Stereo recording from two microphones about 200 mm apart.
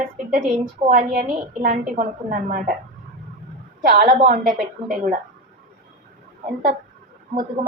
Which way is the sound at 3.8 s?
45° right (ahead or behind).